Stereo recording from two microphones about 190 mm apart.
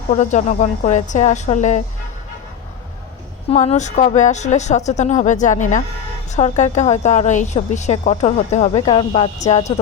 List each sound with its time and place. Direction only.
0.1 s a woman's voice: 40° left (ahead or behind)
3.5 s a woman's voice: 35° left (ahead or behind)
8.8 s speech: 25° left (ahead or behind)